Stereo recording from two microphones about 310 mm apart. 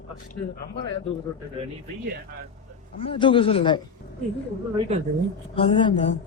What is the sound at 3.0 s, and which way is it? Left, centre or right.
Speech, centre.